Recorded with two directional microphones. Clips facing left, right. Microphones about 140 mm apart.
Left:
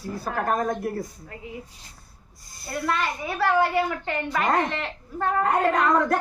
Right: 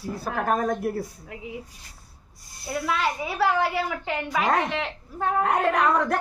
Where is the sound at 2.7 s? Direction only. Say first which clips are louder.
Right 1 dB; 5° right (ahead or behind).